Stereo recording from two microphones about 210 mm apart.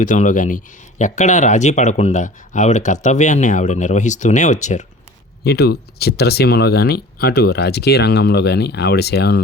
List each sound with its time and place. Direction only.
0.0 s speech: 40° left (ahead or behind)
5.4 s speech: 50° left (ahead or behind)